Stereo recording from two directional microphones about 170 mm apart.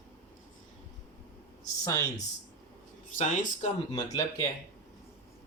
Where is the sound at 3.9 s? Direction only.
20° left (ahead or behind).